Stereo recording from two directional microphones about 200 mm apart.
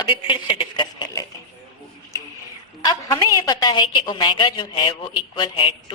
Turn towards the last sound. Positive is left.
turn(degrees=25)  # may be behind; listen again after turning